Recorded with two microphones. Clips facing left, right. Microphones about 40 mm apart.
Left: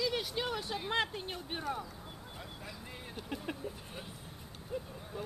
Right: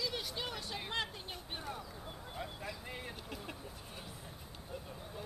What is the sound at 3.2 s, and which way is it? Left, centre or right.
Speech, centre.